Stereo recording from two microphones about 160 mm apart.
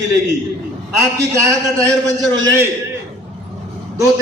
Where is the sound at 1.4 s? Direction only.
20° right (ahead or behind).